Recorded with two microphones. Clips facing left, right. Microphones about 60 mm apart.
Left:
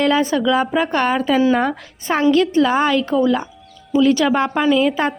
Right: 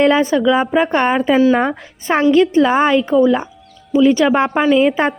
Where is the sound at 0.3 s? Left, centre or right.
Centre.